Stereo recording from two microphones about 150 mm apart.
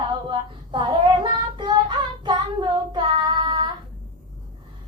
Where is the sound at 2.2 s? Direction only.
30° right (ahead or behind).